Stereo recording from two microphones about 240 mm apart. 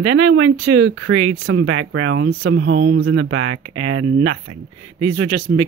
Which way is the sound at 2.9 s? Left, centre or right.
Right.